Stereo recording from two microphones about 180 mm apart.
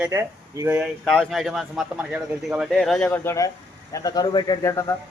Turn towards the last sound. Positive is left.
turn(degrees=15)  # may be behind; listen again after turning